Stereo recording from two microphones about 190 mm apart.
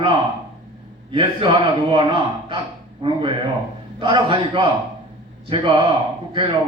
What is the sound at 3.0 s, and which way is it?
A man's voice, 25° right (ahead or behind).